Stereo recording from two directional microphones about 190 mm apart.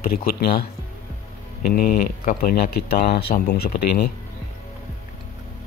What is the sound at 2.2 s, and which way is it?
Speech, 55° left (ahead or behind).